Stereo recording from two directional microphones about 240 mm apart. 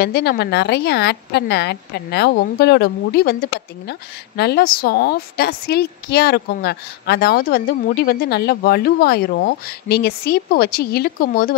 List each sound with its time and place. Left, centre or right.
0.0 s a woman's voice: left